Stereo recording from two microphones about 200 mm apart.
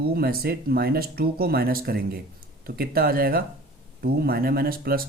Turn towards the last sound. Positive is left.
turn(degrees=-45)  # may be behind; listen again after turning